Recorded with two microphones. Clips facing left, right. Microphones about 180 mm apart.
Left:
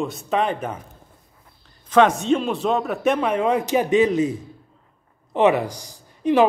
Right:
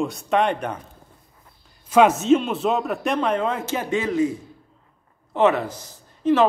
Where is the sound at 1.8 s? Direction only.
5° right (ahead or behind); by 6.5 s 15° left (ahead or behind).